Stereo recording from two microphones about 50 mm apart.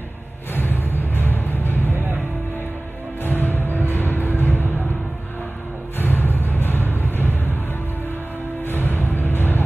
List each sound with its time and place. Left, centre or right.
0.6 s music: left
1.9 s music: right
3.3 s music: left
5.9 s music: left
8.6 s music: left